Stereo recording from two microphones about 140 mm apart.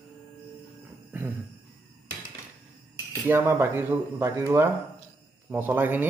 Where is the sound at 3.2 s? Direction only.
20° right (ahead or behind).